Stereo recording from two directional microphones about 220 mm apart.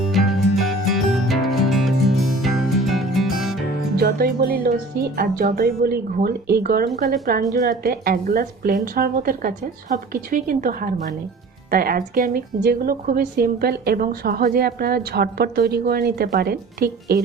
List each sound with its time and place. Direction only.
0.1 s music: centre (ahead or behind)
3.9 s music: 45° right (ahead or behind)
5.1 s a woman's voice: 40° right (ahead or behind)